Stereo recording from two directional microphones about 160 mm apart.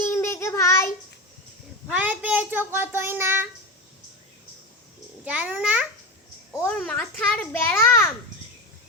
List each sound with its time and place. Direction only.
0.0 s child singing: 15° left (ahead or behind)
1.9 s a child's voice: 10° right (ahead or behind)
5.2 s a child's voice: 10° right (ahead or behind)
6.7 s a child's voice: 5° left (ahead or behind)